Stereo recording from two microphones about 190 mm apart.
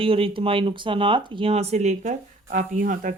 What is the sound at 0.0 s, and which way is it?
Speech, 30° right (ahead or behind).